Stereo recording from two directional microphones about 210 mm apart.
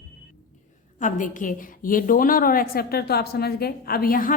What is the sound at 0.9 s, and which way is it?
A woman's voice, 40° left (ahead or behind).